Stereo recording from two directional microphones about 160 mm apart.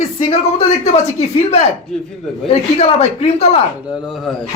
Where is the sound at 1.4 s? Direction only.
45° left (ahead or behind).